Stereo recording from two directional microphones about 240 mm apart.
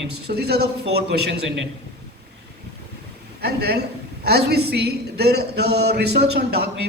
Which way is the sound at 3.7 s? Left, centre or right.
Right.